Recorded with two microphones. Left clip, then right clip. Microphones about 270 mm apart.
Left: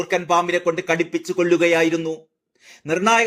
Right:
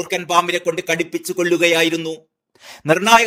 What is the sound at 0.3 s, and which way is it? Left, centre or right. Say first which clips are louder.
Speech: right 5 dB; right.